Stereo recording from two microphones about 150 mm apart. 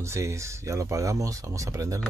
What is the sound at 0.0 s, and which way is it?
Speech, 20° right (ahead or behind).